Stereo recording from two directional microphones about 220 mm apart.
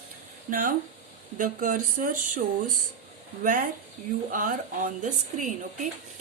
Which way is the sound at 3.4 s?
40° right (ahead or behind).